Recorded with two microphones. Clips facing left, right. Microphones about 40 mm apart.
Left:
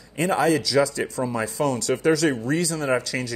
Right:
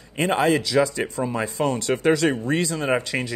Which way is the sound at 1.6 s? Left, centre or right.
Right.